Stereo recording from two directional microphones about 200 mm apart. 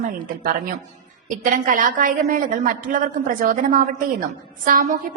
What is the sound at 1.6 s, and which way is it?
A woman's voice, 40° right (ahead or behind).